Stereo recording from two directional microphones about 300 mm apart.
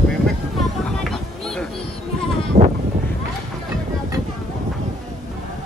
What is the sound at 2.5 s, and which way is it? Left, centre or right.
Sheep, right.